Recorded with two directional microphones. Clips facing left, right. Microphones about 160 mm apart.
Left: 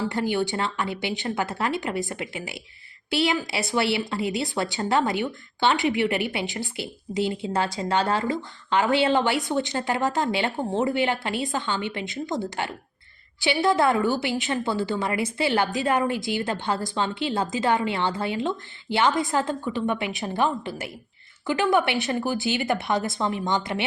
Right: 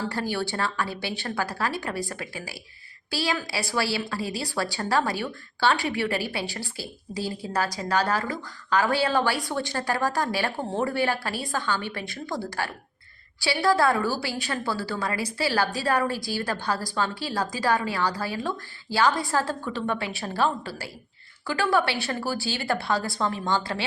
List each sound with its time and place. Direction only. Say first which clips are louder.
0.1 s a woman's voice: left 4 dB; 20° left (ahead or behind)